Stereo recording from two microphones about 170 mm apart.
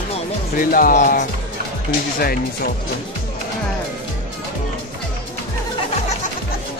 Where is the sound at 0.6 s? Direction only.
55° left (ahead or behind).